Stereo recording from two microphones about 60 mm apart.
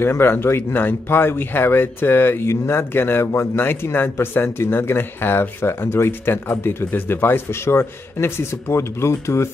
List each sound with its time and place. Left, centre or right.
0.0 s speech: left